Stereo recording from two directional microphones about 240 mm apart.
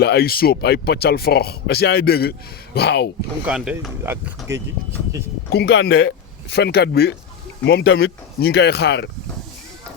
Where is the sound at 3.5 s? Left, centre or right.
Centre.